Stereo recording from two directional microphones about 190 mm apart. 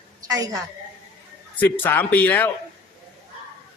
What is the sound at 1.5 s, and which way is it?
Speech, 10° left (ahead or behind).